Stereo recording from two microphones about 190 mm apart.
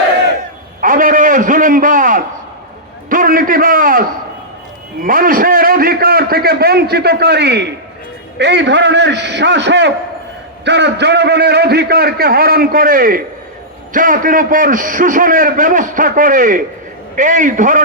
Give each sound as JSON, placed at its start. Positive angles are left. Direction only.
{"t": 0.8, "sound": "a man's voice", "side_deg": -45}
{"t": 5.0, "sound": "a man's voice", "side_deg": -45}